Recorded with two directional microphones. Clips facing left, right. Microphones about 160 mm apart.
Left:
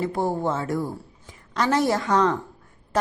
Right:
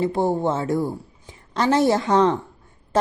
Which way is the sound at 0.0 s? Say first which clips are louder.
Right 4 dB; 25° right (ahead or behind).